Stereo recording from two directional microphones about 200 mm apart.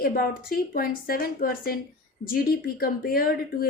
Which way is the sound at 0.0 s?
45° left (ahead or behind).